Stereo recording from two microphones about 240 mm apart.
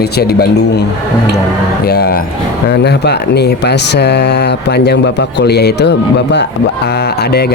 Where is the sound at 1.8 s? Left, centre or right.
Left.